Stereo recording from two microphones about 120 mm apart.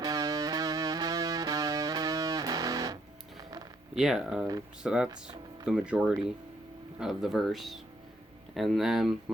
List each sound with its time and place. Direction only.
0.0 s music: 30° right (ahead or behind)
3.9 s speech: 5° right (ahead or behind)